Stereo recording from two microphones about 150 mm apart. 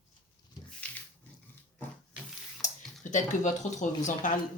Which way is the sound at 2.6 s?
55° left (ahead or behind).